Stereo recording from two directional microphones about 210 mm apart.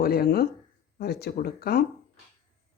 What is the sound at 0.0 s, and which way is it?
Speech, 45° left (ahead or behind).